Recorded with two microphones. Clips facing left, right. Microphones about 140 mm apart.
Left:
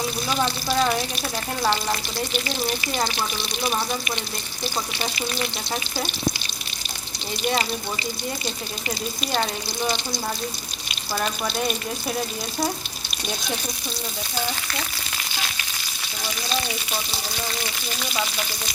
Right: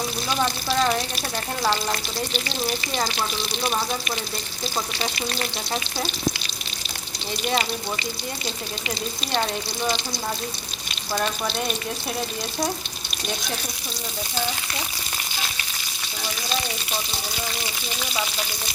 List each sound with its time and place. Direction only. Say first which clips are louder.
0.3 s frying: right 1 dB; centre (ahead or behind)
3.6 s frying: left 1 dB; 5° left (ahead or behind)
11.1 s frying: right 1 dB; centre (ahead or behind)